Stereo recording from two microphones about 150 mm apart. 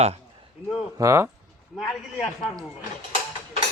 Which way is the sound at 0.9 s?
20° right (ahead or behind).